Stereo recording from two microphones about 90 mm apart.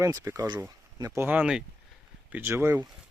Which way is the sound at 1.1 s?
20° right (ahead or behind).